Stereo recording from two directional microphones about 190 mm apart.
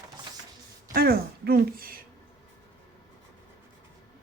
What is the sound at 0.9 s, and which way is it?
Speech, 55° right (ahead or behind).